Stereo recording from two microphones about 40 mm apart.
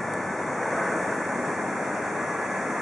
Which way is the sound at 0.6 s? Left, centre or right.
Centre.